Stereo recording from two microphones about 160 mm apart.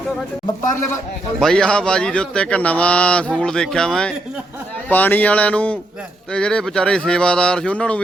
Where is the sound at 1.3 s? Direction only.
5° left (ahead or behind).